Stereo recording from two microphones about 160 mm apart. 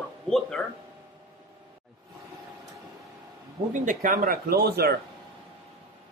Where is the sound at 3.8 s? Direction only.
60° right (ahead or behind); by 5.0 s 85° right.